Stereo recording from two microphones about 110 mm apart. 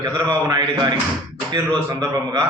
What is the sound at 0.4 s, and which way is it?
A man's voice, 40° right (ahead or behind).